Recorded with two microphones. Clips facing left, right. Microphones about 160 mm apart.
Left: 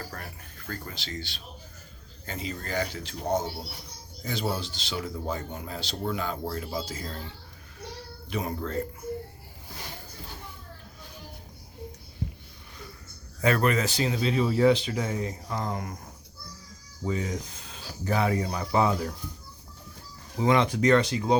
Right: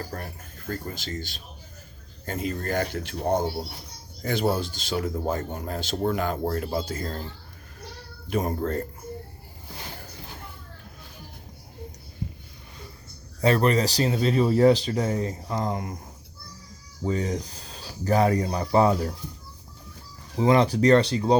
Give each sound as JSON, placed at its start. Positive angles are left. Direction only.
{"t": 0.1, "sound": "a sound", "side_deg": -45}
{"t": 0.7, "sound": "speech", "side_deg": -45}
{"t": 8.3, "sound": "speech", "side_deg": -45}
{"t": 13.4, "sound": "speech", "side_deg": -30}
{"t": 15.4, "sound": "speech", "side_deg": -25}
{"t": 17.1, "sound": "speech", "side_deg": -40}
{"t": 20.4, "sound": "speech", "side_deg": -30}